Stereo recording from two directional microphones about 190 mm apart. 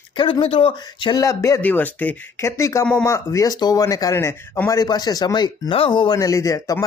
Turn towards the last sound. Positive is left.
turn(degrees=15)  # may be behind; listen again after turning